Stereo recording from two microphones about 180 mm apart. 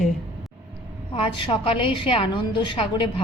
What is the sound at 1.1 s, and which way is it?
A woman's voice, 30° left (ahead or behind).